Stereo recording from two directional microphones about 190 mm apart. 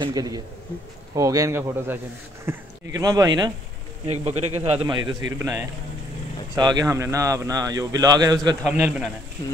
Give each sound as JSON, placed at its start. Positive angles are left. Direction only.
{"t": 0.0, "sound": "speech", "side_deg": -20}
{"t": 4.1, "sound": "speech", "side_deg": -35}
{"t": 5.4, "sound": "speech", "side_deg": -15}
{"t": 8.6, "sound": "a man's voice", "side_deg": -5}